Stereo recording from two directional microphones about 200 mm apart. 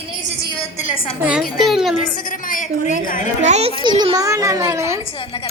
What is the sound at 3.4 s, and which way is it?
A child's voice, 30° right (ahead or behind).